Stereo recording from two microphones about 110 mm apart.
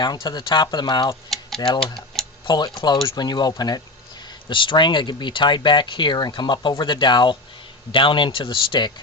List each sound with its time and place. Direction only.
0.0 s speech: 40° left (ahead or behind)
1.3 s typewriter: centre (ahead or behind)
2.1 s tick-tock: centre (ahead or behind)
2.5 s speech: 40° left (ahead or behind)